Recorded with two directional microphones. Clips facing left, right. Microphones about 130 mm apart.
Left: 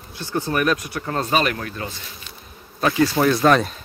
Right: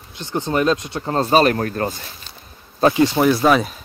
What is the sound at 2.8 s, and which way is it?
Speech, 25° right (ahead or behind).